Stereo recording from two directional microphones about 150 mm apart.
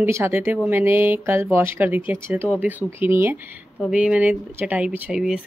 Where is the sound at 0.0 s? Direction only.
15° right (ahead or behind).